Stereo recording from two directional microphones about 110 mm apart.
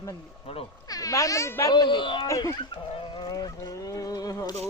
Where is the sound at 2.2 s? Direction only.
30° left (ahead or behind).